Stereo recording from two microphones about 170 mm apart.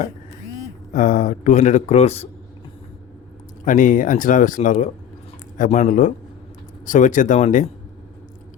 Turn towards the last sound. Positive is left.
turn(degrees=50)  # may be behind; listen again after turning